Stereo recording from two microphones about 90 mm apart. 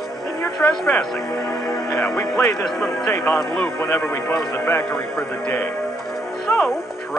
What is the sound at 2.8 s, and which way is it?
Speech, 30° left (ahead or behind).